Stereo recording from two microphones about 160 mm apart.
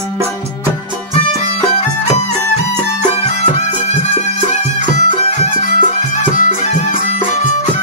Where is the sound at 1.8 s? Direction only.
45° left (ahead or behind).